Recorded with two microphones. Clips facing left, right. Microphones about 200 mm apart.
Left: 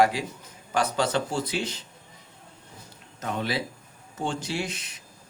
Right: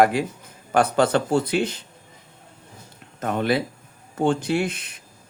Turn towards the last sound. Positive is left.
turn(degrees=-55)  # may be behind; listen again after turning